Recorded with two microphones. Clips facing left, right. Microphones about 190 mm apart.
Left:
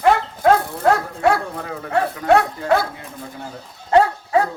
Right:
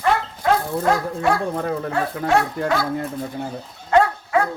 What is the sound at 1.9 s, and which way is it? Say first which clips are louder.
Speech: left 7 dB; 60° left (ahead or behind).